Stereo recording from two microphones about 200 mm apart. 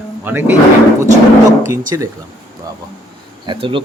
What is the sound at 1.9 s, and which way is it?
Speech, 15° right (ahead or behind).